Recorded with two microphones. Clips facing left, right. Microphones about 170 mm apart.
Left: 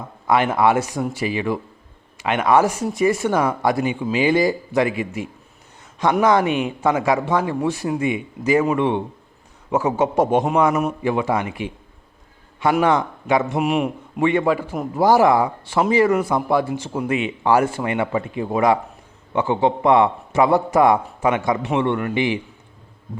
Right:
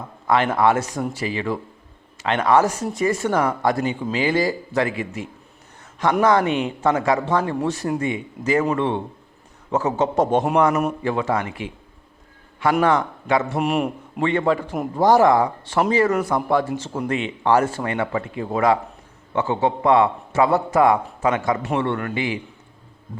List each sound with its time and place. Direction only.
0.3 s speech: 15° left (ahead or behind)
12.8 s speech: 15° left (ahead or behind)
13.6 s a man's voice: centre (ahead or behind)
14.2 s speech: 15° left (ahead or behind)